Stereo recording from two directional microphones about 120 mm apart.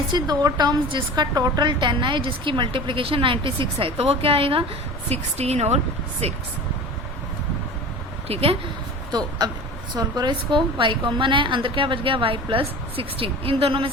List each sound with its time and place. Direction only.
0.1 s a woman's voice: 35° right (ahead or behind); by 4.6 s 50° right (ahead or behind)
5.0 s a woman's voice: 65° right (ahead or behind)
8.3 s a woman's voice: 55° right (ahead or behind)
9.1 s a woman's voice: 35° right (ahead or behind); by 13.9 s 50° right (ahead or behind)